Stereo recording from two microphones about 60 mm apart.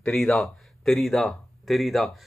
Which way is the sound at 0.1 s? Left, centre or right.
Centre.